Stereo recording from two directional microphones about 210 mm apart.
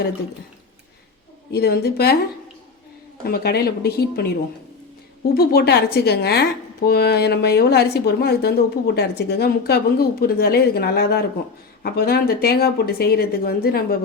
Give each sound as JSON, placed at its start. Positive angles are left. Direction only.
{"t": 1.5, "sound": "speech", "side_deg": 50}
{"t": 3.2, "sound": "speech", "side_deg": 45}
{"t": 5.3, "sound": "speech", "side_deg": 50}